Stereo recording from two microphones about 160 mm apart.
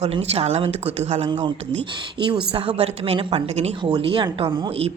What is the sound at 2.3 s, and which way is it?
A woman's voice, 35° right (ahead or behind).